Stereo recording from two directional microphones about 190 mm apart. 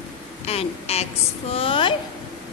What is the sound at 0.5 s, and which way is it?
A woman's voice, 30° left (ahead or behind).